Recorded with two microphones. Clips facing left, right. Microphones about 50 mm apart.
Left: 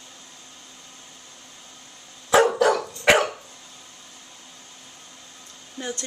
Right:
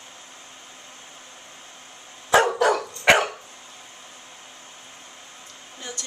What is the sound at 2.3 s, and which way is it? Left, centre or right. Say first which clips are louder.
Dog: left 1 dB; centre.